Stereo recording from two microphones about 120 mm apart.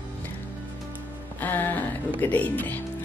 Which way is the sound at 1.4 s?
15° left (ahead or behind).